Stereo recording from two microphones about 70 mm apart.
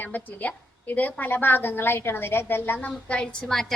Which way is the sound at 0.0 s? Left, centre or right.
Left.